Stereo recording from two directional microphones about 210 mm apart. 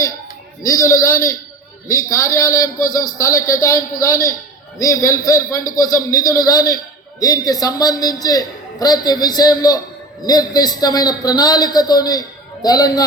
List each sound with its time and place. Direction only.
0.6 s a man's voice: 15° left (ahead or behind)